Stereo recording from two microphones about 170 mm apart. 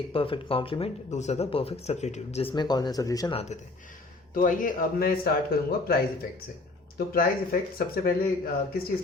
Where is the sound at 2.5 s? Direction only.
25° left (ahead or behind).